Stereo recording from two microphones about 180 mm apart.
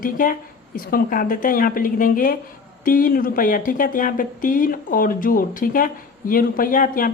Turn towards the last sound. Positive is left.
turn(degrees=50)  # may be behind; listen again after turning